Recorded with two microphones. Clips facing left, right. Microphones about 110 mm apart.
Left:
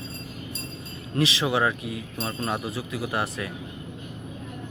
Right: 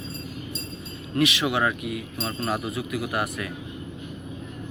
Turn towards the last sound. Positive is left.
turn(degrees=30)  # may be behind; listen again after turning